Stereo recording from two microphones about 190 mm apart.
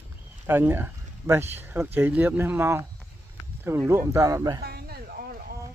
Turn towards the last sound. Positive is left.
turn(degrees=-55)  # may be behind; listen again after turning